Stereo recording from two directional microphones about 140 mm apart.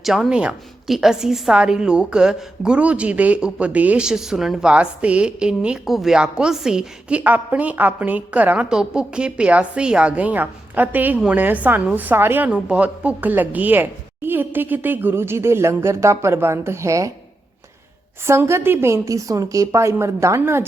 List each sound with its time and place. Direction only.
0.0 s a woman's voice: centre (ahead or behind); by 17.1 s 20° right (ahead or behind)
18.3 s a woman's voice: 20° right (ahead or behind)